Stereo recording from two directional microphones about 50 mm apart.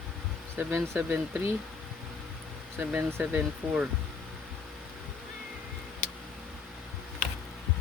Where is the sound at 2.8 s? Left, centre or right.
Right.